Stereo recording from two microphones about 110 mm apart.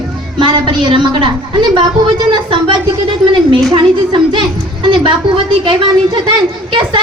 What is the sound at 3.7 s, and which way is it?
Speech, 50° right (ahead or behind).